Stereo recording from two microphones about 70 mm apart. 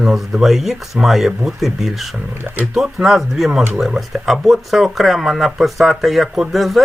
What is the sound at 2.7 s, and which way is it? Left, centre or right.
Speech, centre.